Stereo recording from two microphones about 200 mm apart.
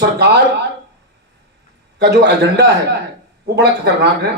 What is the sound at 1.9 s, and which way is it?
Speech, 55° right (ahead or behind).